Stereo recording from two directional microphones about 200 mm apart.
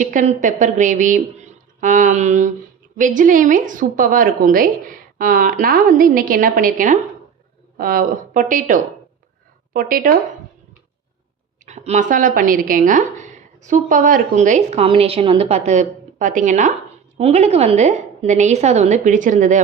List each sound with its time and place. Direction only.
0.0 s a woman's voice: 40° right (ahead or behind)
11.6 s speech: 35° right (ahead or behind)